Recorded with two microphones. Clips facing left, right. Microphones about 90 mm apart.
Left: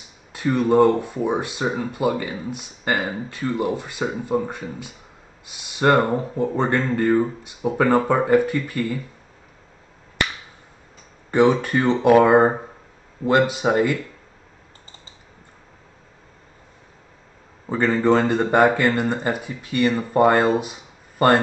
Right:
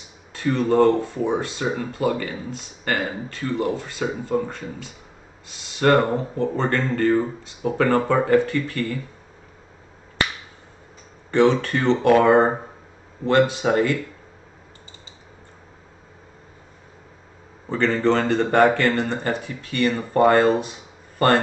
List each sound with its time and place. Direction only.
0.3 s speech: 15° left (ahead or behind)
11.3 s speech: 15° left (ahead or behind)
17.6 s speech: 15° left (ahead or behind)